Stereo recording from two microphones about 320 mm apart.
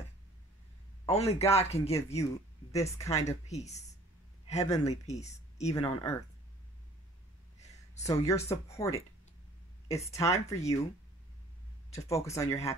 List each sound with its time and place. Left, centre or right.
1.0 s speech: centre
3.3 s speech: left
8.0 s speech: centre
11.9 s speech: centre